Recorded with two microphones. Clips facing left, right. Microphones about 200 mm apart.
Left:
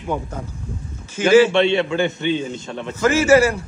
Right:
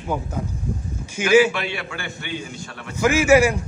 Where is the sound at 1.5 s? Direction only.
25° left (ahead or behind).